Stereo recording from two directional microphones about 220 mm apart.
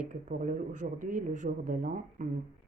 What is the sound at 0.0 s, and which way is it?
Speech, 35° right (ahead or behind).